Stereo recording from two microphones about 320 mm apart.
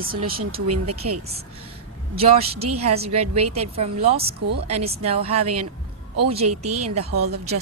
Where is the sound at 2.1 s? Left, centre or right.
Centre.